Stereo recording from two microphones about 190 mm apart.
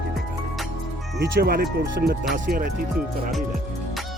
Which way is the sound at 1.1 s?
55° right (ahead or behind).